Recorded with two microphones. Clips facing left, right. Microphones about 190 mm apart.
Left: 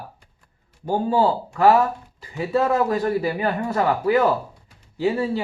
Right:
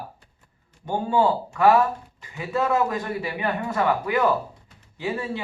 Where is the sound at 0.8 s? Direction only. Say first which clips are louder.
Left 2 dB; 35° left (ahead or behind).